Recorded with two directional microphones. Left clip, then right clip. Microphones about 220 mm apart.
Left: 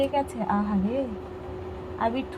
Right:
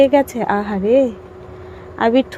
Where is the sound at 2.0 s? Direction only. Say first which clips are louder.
Right 12 dB; 50° right (ahead or behind).